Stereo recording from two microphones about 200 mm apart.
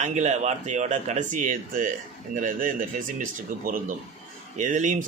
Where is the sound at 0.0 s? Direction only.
35° right (ahead or behind).